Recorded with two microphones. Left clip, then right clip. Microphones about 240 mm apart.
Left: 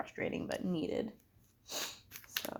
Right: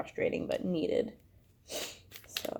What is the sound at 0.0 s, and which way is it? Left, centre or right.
Speech, centre.